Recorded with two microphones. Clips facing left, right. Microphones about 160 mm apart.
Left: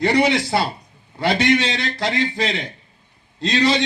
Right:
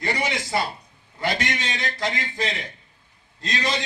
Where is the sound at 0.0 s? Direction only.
70° left (ahead or behind).